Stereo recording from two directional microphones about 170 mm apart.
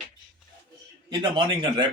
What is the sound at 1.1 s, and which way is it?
Speech, 25° right (ahead or behind).